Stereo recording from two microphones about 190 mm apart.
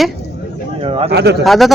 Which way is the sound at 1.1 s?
60° right (ahead or behind).